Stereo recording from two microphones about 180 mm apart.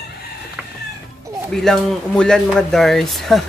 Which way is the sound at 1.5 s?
5° left (ahead or behind).